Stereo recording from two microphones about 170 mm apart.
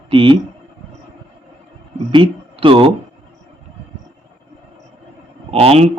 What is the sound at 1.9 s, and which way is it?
Speech, 30° right (ahead or behind).